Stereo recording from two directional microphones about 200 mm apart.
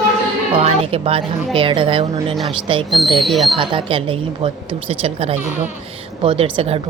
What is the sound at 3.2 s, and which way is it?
Speech, centre (ahead or behind).